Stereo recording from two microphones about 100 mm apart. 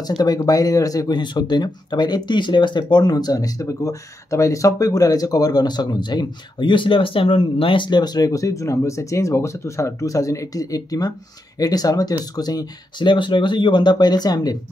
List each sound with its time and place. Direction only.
0.0 s speech: 40° left (ahead or behind)